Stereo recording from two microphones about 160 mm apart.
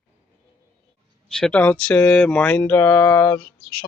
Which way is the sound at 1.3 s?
5° left (ahead or behind).